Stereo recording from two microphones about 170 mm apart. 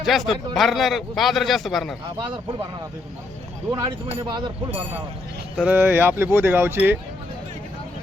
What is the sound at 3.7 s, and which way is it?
Speech, 25° right (ahead or behind).